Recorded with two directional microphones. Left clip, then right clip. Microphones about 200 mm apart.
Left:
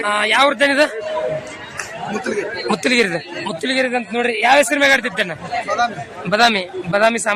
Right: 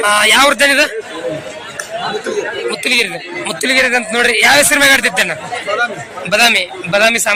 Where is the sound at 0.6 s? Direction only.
20° left (ahead or behind).